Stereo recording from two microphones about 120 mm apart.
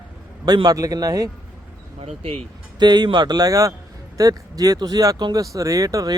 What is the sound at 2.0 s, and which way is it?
Speech, 55° right (ahead or behind).